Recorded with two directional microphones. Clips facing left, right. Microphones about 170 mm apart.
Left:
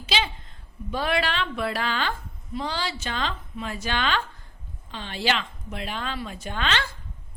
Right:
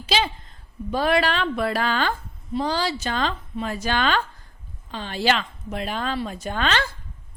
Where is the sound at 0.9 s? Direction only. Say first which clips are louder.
Right 5 dB; 40° right (ahead or behind).